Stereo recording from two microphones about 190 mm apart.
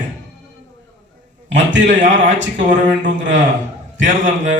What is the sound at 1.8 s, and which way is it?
A man's voice, 40° right (ahead or behind).